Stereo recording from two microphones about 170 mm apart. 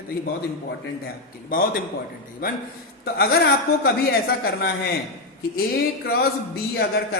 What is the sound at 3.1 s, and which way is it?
Speech, 70° left (ahead or behind).